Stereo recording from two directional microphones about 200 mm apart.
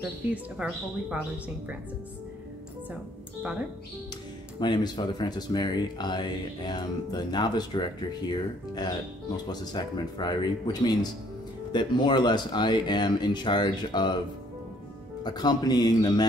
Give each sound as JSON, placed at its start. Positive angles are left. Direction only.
{"t": 0.0, "sound": "speech", "side_deg": -5}
{"t": 4.6, "sound": "speech", "side_deg": 20}
{"t": 15.2, "sound": "speech", "side_deg": 20}